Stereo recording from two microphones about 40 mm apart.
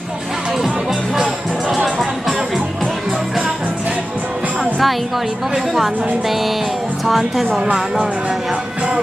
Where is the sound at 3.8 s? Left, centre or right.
Right.